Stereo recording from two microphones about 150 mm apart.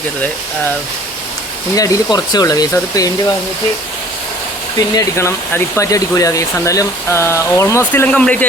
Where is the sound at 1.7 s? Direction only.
25° left (ahead or behind).